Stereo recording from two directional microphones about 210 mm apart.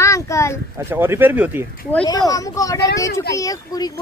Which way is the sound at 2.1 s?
15° left (ahead or behind).